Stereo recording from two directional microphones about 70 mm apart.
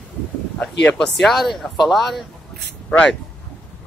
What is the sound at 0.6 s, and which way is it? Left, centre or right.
Speech, centre.